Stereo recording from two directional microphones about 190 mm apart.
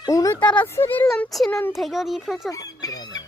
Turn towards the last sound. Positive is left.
turn(degrees=20)  # may be behind; listen again after turning